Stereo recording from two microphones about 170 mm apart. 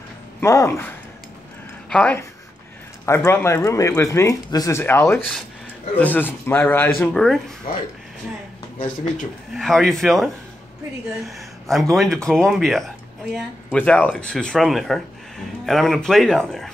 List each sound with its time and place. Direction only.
0.4 s speech: 15° left (ahead or behind)
9.6 s speech: centre (ahead or behind)